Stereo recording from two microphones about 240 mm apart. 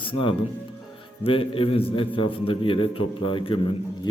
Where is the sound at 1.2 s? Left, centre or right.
Left.